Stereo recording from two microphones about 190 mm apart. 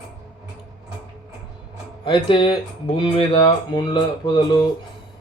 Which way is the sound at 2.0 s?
25° left (ahead or behind).